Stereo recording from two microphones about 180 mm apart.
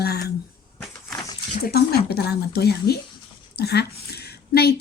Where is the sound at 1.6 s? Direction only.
60° left (ahead or behind).